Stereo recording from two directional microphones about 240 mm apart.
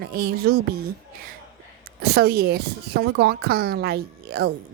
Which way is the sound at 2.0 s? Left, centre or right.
Right.